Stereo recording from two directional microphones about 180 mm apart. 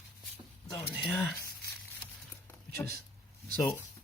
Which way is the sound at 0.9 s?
10° left (ahead or behind).